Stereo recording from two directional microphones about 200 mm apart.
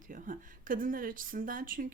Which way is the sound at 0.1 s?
40° right (ahead or behind).